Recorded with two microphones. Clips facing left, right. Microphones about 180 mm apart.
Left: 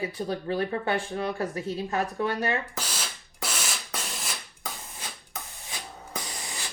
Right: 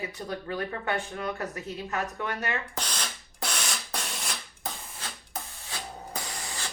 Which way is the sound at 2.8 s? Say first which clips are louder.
Even; 5° left (ahead or behind).